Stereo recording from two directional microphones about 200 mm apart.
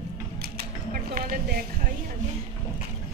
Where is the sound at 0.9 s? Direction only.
45° right (ahead or behind).